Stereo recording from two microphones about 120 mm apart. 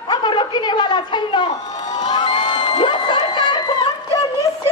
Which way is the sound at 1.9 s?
35° left (ahead or behind).